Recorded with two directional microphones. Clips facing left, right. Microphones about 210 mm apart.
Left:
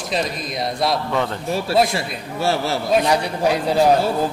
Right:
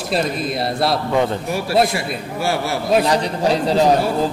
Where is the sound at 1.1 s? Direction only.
15° right (ahead or behind).